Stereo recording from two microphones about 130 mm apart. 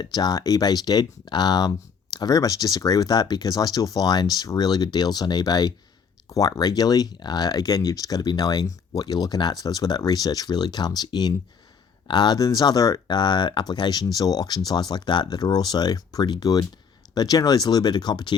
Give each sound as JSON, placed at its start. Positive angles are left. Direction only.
{"t": 0.0, "sound": "speech", "side_deg": 35}